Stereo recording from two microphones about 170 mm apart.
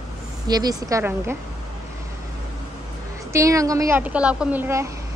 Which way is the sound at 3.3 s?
20° right (ahead or behind).